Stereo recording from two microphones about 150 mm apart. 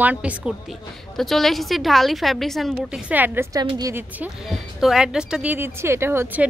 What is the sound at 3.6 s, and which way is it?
Speech, 25° right (ahead or behind).